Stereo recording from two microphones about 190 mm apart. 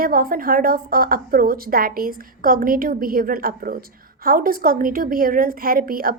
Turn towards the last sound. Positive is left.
turn(degrees=-50)  # may be behind; listen again after turning